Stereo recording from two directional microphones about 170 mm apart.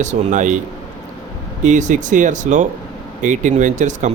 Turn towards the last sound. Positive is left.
turn(degrees=-45)  # may be behind; listen again after turning